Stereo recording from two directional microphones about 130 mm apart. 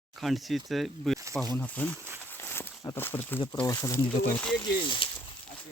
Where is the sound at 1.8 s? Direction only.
15° left (ahead or behind).